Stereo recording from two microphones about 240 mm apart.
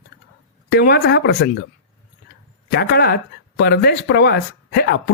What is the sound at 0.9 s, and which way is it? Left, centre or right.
Speech, left.